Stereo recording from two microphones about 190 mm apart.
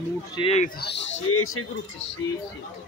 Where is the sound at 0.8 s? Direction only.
65° left (ahead or behind); by 1.6 s 90° left.